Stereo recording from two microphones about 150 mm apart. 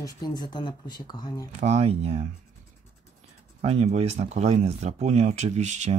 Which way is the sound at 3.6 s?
45° right (ahead or behind).